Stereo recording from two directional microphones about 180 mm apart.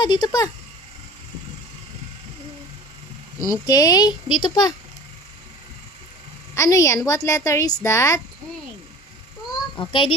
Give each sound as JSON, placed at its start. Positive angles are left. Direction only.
{"t": 0.0, "sound": "speech", "side_deg": 25}
{"t": 3.3, "sound": "speech", "side_deg": 20}
{"t": 6.5, "sound": "speech", "side_deg": 15}
{"t": 9.8, "sound": "speech", "side_deg": 30}